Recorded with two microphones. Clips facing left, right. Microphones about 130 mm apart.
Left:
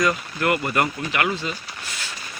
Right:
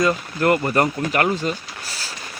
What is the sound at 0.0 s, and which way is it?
Speech, 30° right (ahead or behind).